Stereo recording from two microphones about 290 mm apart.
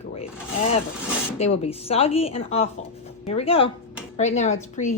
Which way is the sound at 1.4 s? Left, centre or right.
Centre.